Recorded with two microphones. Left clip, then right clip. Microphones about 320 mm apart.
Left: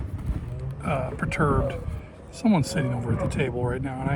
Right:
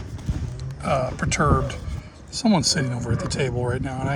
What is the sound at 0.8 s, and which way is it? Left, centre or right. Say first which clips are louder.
Speech: right 5 dB; centre.